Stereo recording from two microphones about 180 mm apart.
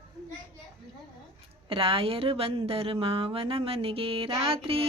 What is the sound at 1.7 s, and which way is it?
A woman's voice, 30° right (ahead or behind).